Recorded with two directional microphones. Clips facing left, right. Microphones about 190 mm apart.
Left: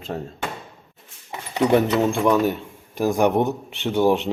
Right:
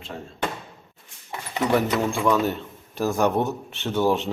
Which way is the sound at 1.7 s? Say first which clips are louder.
Left 4 dB; 25° left (ahead or behind).